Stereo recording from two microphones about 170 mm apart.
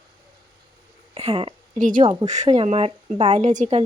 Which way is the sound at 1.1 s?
35° right (ahead or behind).